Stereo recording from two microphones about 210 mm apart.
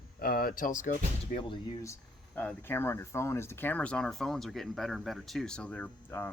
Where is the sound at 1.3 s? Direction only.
25° left (ahead or behind).